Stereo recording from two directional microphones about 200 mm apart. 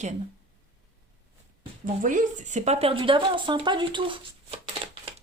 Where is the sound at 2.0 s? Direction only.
40° right (ahead or behind); by 4.2 s 25° right (ahead or behind).